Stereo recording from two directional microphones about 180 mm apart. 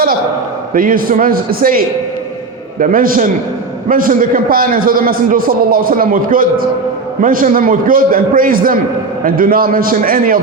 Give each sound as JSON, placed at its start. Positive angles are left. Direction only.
{"t": 0.7, "sound": "a man's voice", "side_deg": -50}
{"t": 2.8, "sound": "a man's voice", "side_deg": -50}